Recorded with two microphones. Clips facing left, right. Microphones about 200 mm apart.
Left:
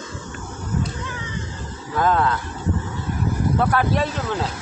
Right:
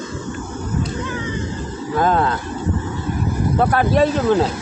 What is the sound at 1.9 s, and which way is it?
Speech, 30° right (ahead or behind).